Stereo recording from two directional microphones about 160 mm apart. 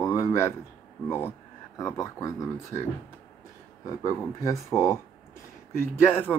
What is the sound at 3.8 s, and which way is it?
Speech, 20° left (ahead or behind).